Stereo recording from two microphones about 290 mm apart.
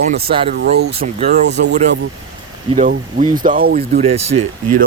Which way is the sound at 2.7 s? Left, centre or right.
Right.